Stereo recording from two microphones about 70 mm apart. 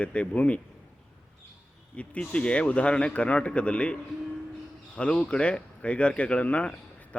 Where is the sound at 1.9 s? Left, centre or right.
Centre.